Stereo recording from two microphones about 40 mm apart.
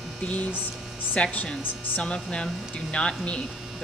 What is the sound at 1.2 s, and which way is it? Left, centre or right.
Speech, left.